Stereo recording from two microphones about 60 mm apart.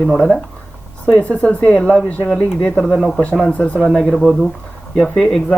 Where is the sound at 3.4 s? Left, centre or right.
Centre.